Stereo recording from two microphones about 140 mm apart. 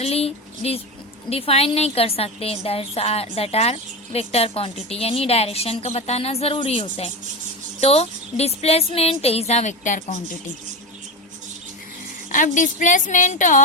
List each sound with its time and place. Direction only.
0.0 s a sound: 45° left (ahead or behind)
1.3 s a woman's voice: 45° left (ahead or behind); by 10.2 s 60° left (ahead or behind)
12.3 s a woman's voice: 70° left (ahead or behind)